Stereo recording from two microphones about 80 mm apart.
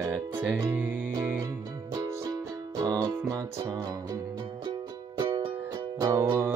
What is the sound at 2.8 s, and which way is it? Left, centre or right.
Music, right.